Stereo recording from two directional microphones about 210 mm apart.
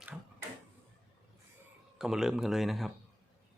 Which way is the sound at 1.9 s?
Centre (ahead or behind).